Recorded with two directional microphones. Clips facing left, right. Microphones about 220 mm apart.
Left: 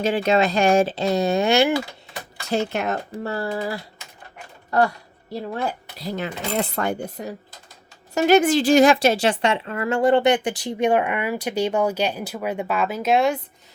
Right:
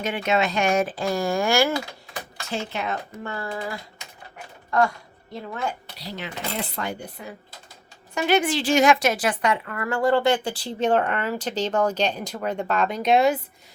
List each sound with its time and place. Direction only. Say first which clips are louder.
0.0 s speech: left 5 dB; 30° left (ahead or behind)
2.5 s speech: left 6 dB; 40° left (ahead or behind)
3.1 s speech: left 5 dB; 35° left (ahead or behind)
5.3 s speech: left 4 dB; 35° left (ahead or behind)
6.0 s speech: left 7 dB; 45° left (ahead or behind)
8.1 s a woman's voice: left 6 dB; 40° left (ahead or behind); by 13.4 s centre (ahead or behind)